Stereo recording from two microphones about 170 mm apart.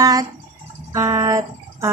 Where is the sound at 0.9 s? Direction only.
20° right (ahead or behind).